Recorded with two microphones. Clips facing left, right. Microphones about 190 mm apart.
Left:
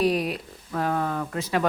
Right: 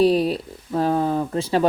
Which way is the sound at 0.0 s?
30° right (ahead or behind).